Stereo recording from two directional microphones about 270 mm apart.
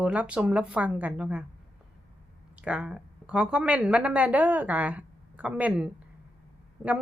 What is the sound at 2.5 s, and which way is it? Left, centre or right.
A woman's voice, centre.